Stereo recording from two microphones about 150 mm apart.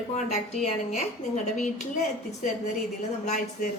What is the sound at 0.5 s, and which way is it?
Speech, 50° left (ahead or behind).